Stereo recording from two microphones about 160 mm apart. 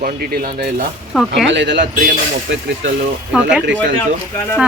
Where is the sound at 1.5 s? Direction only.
90° right.